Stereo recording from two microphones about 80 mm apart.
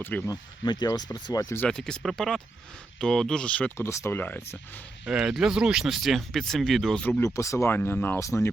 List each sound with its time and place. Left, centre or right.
0.0 s speech: left
0.3 s speech: left
1.6 s speech: centre
3.8 s speech: left
5.0 s speech: centre
7.3 s speech: left
7.7 s speech: left